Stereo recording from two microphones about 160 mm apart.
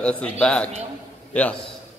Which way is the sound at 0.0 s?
5° left (ahead or behind).